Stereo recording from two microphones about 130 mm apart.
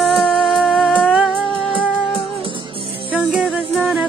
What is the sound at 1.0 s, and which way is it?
Music, 5° right (ahead or behind).